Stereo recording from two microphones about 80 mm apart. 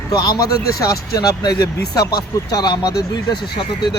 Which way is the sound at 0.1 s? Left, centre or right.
Left.